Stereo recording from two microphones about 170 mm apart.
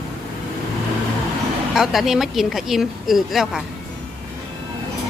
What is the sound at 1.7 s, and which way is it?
A woman's voice, centre (ahead or behind).